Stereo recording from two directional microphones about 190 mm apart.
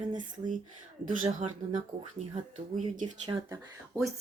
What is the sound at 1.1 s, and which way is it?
Speech, 45° right (ahead or behind).